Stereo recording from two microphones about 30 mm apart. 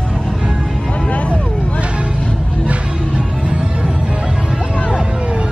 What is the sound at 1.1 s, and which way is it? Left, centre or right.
Vehicle, left.